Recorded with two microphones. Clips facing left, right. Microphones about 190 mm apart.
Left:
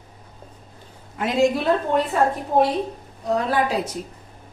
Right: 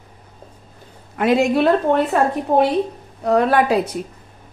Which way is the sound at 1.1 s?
65° right (ahead or behind).